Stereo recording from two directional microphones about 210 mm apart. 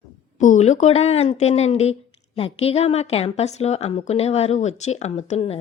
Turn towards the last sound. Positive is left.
turn(degrees=30)  # may be behind; listen again after turning